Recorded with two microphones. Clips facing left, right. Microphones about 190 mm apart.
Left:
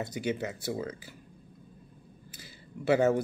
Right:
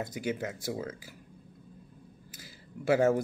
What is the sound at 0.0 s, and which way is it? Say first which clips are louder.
Speech: left 1 dB; 5° right (ahead or behind).